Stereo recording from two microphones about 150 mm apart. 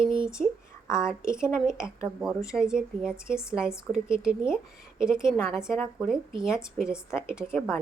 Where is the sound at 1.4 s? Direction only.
15° left (ahead or behind).